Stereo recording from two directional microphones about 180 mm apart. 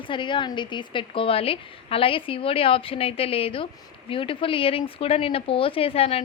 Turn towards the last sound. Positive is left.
turn(degrees=35)  # may be behind; listen again after turning